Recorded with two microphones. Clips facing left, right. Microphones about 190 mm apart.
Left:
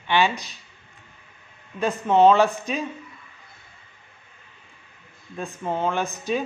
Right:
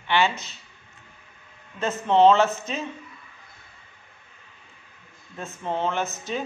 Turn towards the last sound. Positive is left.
turn(degrees=15)  # may be behind; listen again after turning